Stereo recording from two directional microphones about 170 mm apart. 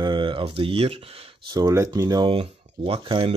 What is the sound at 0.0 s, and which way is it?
Speech, 30° right (ahead or behind).